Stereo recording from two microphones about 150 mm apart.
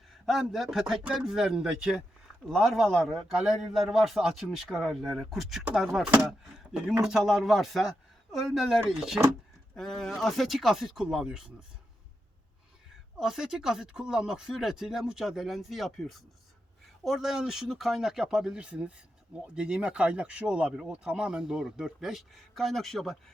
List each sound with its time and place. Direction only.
0.3 s speech: centre (ahead or behind)
13.1 s speech: 5° right (ahead or behind)